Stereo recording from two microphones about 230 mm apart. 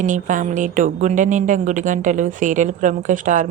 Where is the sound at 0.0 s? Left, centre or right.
Right.